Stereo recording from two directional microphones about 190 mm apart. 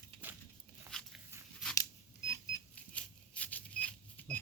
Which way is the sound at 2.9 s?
5° left (ahead or behind).